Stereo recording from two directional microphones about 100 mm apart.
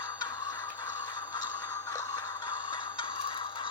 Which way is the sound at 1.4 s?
40° left (ahead or behind).